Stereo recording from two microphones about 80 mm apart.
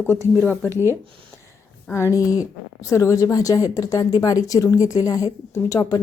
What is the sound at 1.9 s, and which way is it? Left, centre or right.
A woman's voice, left.